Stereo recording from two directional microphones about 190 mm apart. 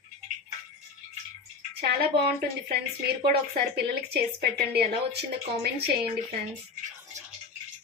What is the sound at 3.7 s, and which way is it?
A woman's voice, 55° right (ahead or behind).